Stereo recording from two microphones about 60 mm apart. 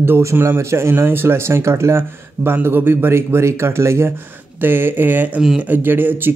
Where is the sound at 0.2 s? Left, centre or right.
Right.